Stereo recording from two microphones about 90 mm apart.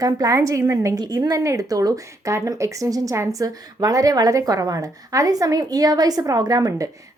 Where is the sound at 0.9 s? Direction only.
50° right (ahead or behind).